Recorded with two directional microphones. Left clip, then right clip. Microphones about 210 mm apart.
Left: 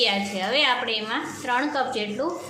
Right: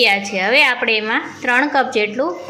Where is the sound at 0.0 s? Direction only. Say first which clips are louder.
Right 8 dB; 25° right (ahead or behind).